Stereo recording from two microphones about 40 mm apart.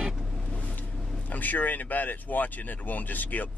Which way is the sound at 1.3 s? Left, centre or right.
Left.